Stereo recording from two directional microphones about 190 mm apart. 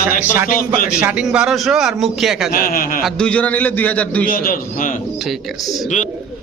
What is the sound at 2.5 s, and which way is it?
Speech, 50° left (ahead or behind).